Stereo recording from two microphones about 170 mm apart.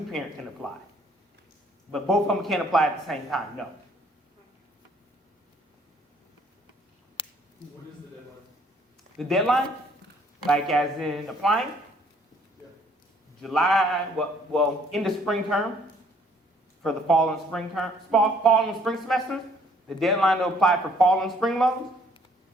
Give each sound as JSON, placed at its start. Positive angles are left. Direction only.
{"t": 0.1, "sound": "speech", "side_deg": 0}
{"t": 1.9, "sound": "speech", "side_deg": 0}
{"t": 7.2, "sound": "finger snapping", "side_deg": 30}
{"t": 9.1, "sound": "speech", "side_deg": 0}
{"t": 13.4, "sound": "speech", "side_deg": 0}
{"t": 16.8, "sound": "speech", "side_deg": 0}